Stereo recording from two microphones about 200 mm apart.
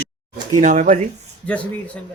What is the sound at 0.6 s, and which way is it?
Speech, 40° right (ahead or behind).